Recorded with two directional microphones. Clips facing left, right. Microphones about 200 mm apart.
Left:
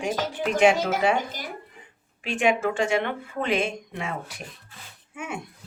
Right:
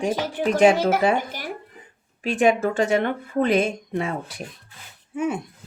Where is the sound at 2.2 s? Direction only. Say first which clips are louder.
Right 4 dB; 40° right (ahead or behind).